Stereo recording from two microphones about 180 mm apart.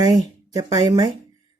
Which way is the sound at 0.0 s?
20° right (ahead or behind).